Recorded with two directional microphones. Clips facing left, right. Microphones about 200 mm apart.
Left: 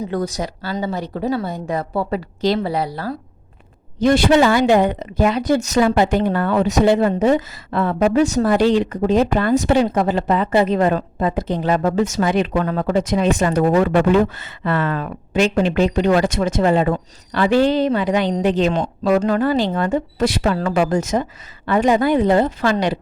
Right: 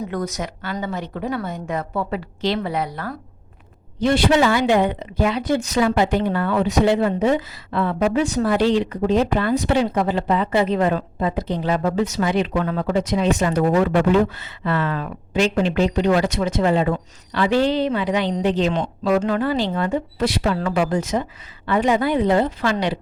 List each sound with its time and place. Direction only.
0.1 s a woman's voice: 30° left (ahead or behind)
4.0 s speech: 45° left (ahead or behind)